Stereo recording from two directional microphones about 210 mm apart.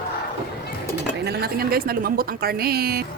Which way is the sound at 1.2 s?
50° right (ahead or behind).